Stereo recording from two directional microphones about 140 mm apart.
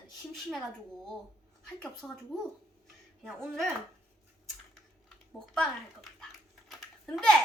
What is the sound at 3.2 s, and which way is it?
Speech, 5° left (ahead or behind).